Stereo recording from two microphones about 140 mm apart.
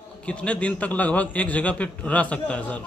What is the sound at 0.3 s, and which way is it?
A man's voice, 10° left (ahead or behind).